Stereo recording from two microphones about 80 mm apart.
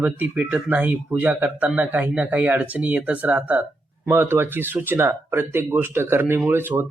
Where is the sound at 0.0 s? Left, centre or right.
Right.